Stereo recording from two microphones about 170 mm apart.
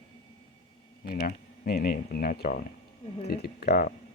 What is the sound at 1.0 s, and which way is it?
Speech, 60° left (ahead or behind).